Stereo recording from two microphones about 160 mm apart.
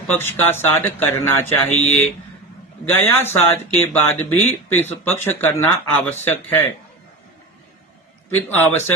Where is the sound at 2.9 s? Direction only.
15° left (ahead or behind).